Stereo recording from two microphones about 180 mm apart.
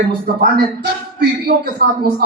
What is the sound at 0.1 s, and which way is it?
A man's voice, 65° right (ahead or behind).